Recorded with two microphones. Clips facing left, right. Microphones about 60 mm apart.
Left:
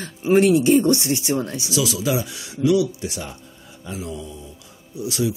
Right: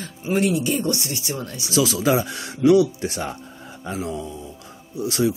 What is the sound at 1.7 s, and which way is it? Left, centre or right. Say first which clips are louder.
Speech: right 4 dB; right.